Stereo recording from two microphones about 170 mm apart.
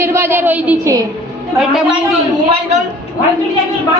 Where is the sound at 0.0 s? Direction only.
15° right (ahead or behind).